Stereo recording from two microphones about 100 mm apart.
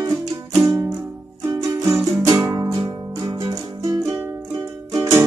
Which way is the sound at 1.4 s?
35° right (ahead or behind).